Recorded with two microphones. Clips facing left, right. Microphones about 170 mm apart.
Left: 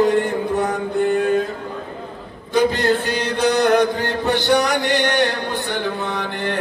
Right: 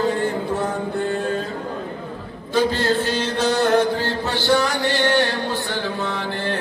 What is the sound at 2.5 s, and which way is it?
Chant, 15° left (ahead or behind).